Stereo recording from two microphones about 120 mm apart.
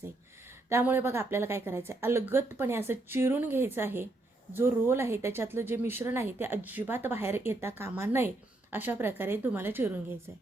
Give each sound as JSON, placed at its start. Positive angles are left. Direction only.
{"t": 0.7, "sound": "a woman's voice", "side_deg": -15}